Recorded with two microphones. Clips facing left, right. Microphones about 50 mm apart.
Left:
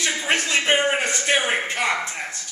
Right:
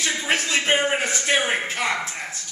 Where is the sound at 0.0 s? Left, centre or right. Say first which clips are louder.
Left 1 dB; centre.